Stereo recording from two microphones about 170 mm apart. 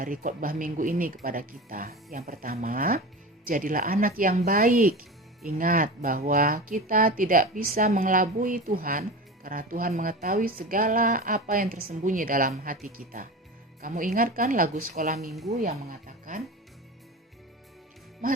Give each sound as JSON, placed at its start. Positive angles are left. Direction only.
{"t": 0.0, "sound": "speech", "side_deg": -55}